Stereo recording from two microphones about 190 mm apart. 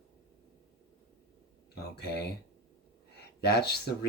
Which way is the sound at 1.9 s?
60° left (ahead or behind).